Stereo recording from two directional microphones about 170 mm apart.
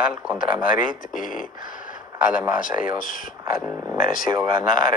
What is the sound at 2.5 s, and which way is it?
Speech, 50° left (ahead or behind).